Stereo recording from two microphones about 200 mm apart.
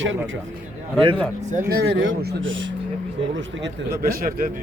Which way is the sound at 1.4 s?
35° right (ahead or behind).